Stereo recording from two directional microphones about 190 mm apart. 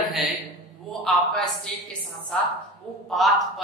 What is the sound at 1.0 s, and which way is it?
A man's voice, centre (ahead or behind).